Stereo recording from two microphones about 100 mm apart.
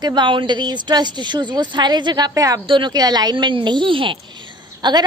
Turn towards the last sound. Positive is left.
turn(degrees=-45)  # may be behind; listen again after turning